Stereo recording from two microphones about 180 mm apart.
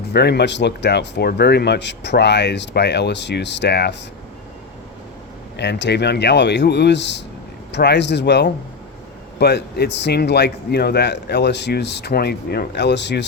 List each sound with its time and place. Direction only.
0.1 s speech: 65° left (ahead or behind)
5.5 s speech: 70° left (ahead or behind)